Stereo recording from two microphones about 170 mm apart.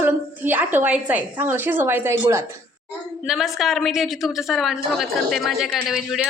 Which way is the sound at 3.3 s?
Centre (ahead or behind).